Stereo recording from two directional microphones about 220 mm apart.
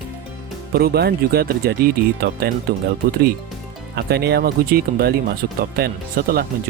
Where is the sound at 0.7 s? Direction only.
45° right (ahead or behind).